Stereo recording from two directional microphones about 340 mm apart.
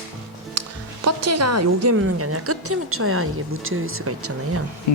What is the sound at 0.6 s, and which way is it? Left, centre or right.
Music, right.